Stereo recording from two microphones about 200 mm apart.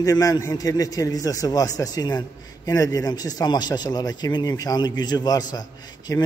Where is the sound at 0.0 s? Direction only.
15° left (ahead or behind).